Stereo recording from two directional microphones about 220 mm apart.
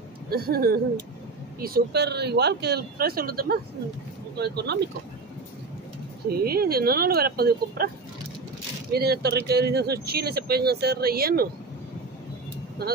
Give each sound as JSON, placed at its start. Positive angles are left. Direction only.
{"t": 0.3, "sound": "speech", "side_deg": -45}
{"t": 6.2, "sound": "speech", "side_deg": -45}
{"t": 8.9, "sound": "speech", "side_deg": -45}
{"t": 12.8, "sound": "speech", "side_deg": -45}